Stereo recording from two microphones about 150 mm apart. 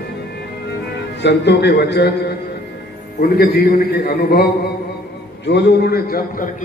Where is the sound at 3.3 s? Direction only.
90° left.